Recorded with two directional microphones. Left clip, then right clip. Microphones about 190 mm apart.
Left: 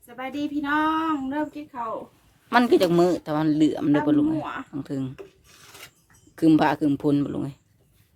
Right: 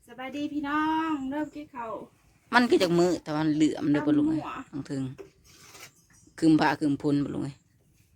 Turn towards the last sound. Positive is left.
turn(degrees=5)  # may be behind; listen again after turning